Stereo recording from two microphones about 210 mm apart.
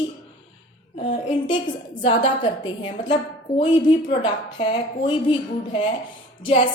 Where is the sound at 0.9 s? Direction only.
25° left (ahead or behind).